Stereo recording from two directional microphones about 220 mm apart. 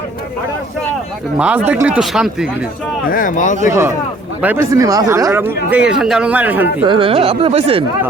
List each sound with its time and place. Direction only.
1.4 s speech: 5° right (ahead or behind)
3.1 s speech: 40° left (ahead or behind)
3.7 s speech: 10° right (ahead or behind)
6.8 s speech: 25° right (ahead or behind)